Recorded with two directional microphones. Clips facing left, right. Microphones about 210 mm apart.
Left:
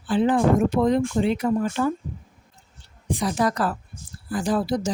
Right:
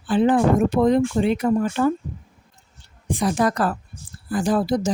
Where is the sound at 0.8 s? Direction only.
55° right (ahead or behind).